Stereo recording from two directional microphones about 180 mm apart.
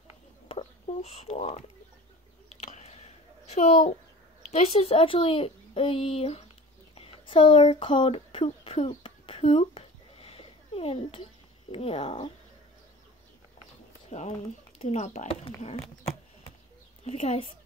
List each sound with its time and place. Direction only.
0.5 s a sound: 35° left (ahead or behind)
4.5 s a child's voice: 35° left (ahead or behind)
7.0 s a sound: 30° left (ahead or behind)
11.7 s a child's voice: 30° left (ahead or behind)
14.1 s a child's voice: 40° left (ahead or behind)
17.0 s a child's voice: 35° left (ahead or behind)